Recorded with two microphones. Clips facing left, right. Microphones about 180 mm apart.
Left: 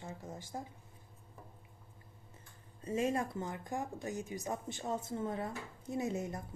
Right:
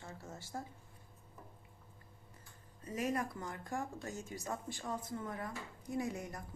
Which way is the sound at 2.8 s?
25° left (ahead or behind).